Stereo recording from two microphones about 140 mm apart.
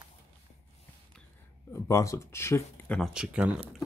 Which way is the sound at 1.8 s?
20° left (ahead or behind).